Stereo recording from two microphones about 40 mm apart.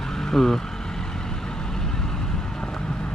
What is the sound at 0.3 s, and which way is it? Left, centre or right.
Speech, centre.